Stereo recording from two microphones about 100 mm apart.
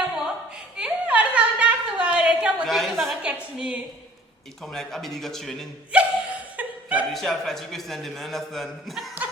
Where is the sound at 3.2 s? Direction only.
10° right (ahead or behind).